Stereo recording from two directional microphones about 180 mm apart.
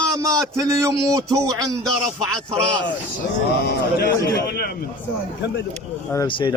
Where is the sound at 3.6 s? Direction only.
60° left (ahead or behind).